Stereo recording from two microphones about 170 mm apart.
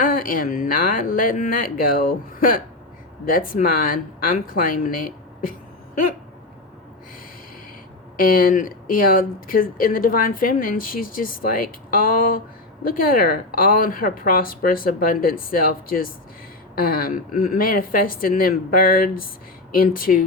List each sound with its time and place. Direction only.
0.0 s a woman's voice: 55° left (ahead or behind)
8.1 s speech: 55° left (ahead or behind)